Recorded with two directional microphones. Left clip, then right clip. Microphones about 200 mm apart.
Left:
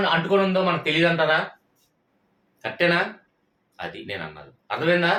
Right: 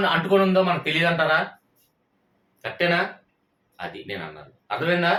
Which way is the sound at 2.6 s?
20° left (ahead or behind).